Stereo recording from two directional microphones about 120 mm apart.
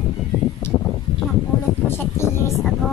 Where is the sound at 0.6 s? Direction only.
20° left (ahead or behind).